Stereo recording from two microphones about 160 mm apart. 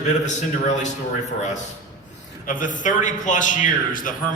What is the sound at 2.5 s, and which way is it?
A man's voice, 55° left (ahead or behind).